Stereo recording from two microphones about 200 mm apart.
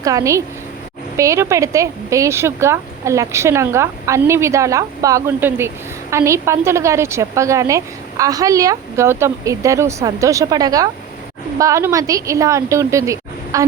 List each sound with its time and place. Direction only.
0.0 s a woman's voice: 15° right (ahead or behind)